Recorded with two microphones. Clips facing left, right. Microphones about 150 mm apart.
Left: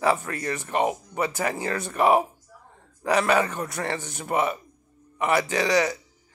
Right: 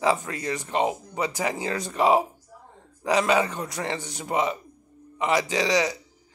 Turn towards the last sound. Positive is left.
turn(degrees=-15)  # may be behind; listen again after turning